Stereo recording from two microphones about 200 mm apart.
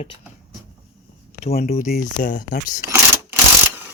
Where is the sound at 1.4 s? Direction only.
30° left (ahead or behind).